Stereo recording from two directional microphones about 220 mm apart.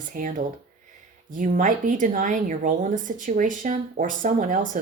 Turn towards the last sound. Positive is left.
turn(degrees=-35)  # may be behind; listen again after turning